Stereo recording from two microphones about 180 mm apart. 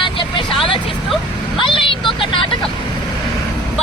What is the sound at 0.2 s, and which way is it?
Vehicle, 30° left (ahead or behind).